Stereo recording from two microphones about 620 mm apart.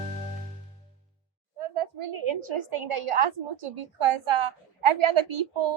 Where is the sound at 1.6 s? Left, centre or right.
Right.